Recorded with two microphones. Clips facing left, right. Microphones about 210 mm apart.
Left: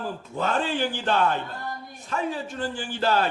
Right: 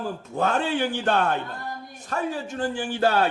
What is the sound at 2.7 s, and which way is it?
Speech, 60° right (ahead or behind).